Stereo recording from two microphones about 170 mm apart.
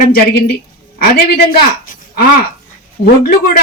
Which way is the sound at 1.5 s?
55° left (ahead or behind).